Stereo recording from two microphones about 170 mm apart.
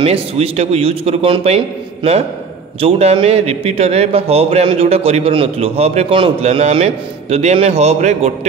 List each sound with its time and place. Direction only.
0.0 s a man's voice: 35° right (ahead or behind)
2.8 s a man's voice: 35° right (ahead or behind)